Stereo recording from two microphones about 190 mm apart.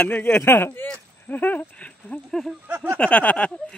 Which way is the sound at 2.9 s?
5° left (ahead or behind).